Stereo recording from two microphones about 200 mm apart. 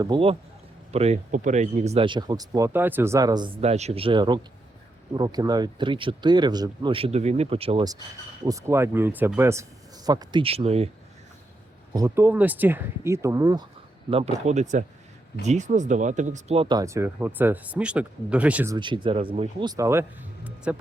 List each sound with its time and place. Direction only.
0.0 s speech: 25° right (ahead or behind)
8.4 s speech: 15° right (ahead or behind); by 10.8 s 30° right (ahead or behind)
11.9 s speech: 15° right (ahead or behind)
14.4 s speech: 35° right (ahead or behind); by 20.7 s 10° right (ahead or behind)